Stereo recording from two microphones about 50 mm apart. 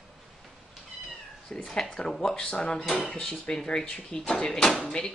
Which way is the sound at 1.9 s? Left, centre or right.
Centre.